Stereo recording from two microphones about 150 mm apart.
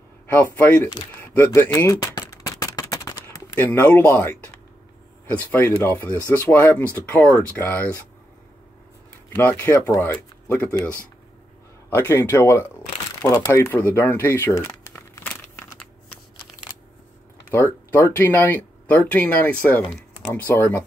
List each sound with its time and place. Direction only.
0.3 s speech: 10° left (ahead or behind)
1.2 s a sound: 15° left (ahead or behind)
5.3 s speech: 10° left (ahead or behind)
9.4 s speech: 10° left (ahead or behind)
11.9 s speech: 15° left (ahead or behind)
13.2 s shuffling cards: 15° left (ahead or behind)
17.9 s speech: 15° left (ahead or behind)